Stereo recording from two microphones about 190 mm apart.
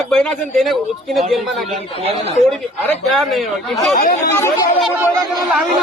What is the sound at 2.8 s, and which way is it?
Speech, centre (ahead or behind).